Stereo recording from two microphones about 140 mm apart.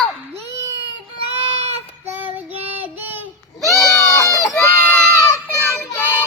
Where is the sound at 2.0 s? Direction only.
15° right (ahead or behind).